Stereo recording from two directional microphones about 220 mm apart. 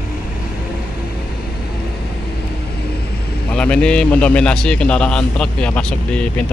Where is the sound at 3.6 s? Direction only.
5° left (ahead or behind).